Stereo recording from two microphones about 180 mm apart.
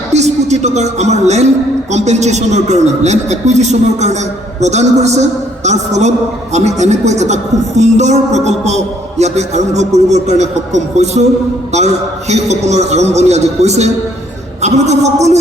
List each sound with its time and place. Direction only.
0.1 s a woman's voice: 40° right (ahead or behind)